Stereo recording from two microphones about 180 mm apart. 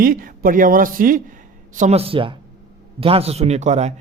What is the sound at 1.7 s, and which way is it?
Speech, 40° right (ahead or behind).